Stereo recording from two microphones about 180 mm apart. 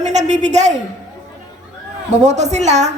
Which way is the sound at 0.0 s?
40° right (ahead or behind).